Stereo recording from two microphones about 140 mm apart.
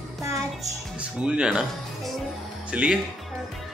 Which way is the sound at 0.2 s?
20° right (ahead or behind).